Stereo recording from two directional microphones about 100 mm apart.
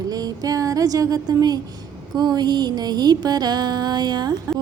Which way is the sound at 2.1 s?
45° right (ahead or behind).